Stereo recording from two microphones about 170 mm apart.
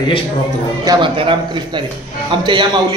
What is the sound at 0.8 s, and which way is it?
A man's voice, 20° right (ahead or behind).